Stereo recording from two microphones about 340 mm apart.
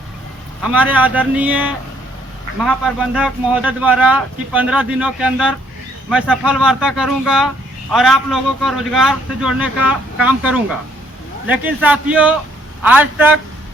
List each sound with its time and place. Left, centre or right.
0.6 s a man's voice: centre